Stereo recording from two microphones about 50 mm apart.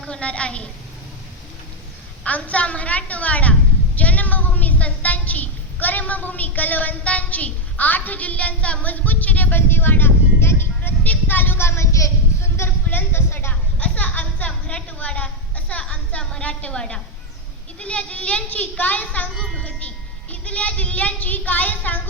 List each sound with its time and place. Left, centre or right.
0.1 s a child's voice: left
2.2 s a child's voice: left
10.4 s music: left
11.0 s a woman's voice: left
11.6 s a sound: left
12.9 s speech: left
13.5 s a sound: left
15.8 s a child's voice: centre
16.7 s a woman's voice: centre
19.5 s a sound: left
20.3 s speech: left